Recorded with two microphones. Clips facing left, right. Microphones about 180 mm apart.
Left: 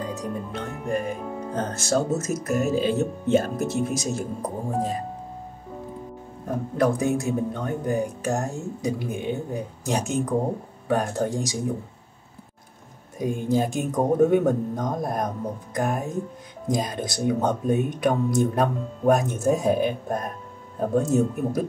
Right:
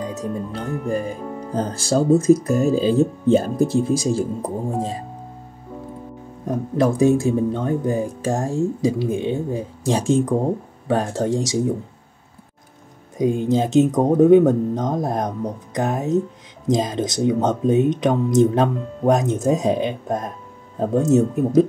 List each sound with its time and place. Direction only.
0.0 s music: 20° right (ahead or behind)
0.8 s speech: 30° right (ahead or behind)
6.4 s speech: 25° right (ahead or behind)
11.2 s speech: 25° right (ahead or behind)
13.2 s speech: 20° right (ahead or behind)